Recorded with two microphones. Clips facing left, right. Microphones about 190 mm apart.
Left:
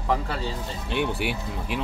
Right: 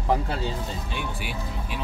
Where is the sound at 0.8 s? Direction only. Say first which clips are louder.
Left 7 dB; 65° left (ahead or behind).